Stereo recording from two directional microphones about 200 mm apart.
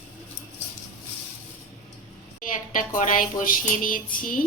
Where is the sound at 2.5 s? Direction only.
40° left (ahead or behind).